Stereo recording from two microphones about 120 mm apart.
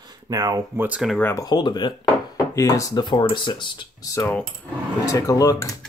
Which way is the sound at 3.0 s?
40° left (ahead or behind).